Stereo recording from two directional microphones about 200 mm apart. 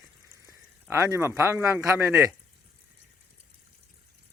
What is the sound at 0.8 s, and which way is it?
Speech, 15° right (ahead or behind).